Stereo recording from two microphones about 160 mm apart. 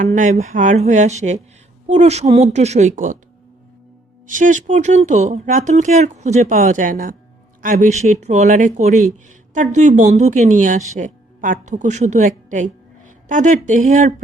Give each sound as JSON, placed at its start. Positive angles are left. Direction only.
{"t": 0.0, "sound": "a woman's voice", "side_deg": -50}
{"t": 4.3, "sound": "a woman's voice", "side_deg": -55}